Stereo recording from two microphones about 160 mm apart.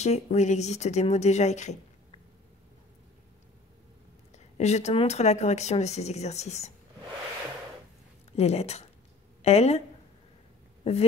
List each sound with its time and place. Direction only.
0.0 s speech: 45° left (ahead or behind)
4.6 s speech: 45° left (ahead or behind)
8.3 s speech: 40° left (ahead or behind)
10.8 s speech: 40° left (ahead or behind)